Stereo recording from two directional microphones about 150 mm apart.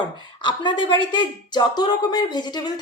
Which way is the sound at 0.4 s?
30° left (ahead or behind).